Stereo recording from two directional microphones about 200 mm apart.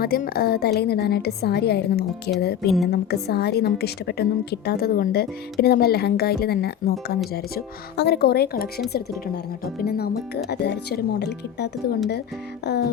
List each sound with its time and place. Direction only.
0.0 s a woman's voice: 50° left (ahead or behind)
2.6 s a woman's voice: centre (ahead or behind)
2.9 s a woman's voice: 55° left (ahead or behind)
9.8 s speech: 50° left (ahead or behind)